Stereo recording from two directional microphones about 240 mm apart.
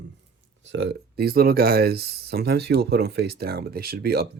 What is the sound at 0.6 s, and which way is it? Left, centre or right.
Speech, right.